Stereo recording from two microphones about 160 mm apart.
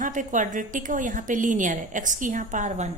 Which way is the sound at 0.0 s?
55° right (ahead or behind).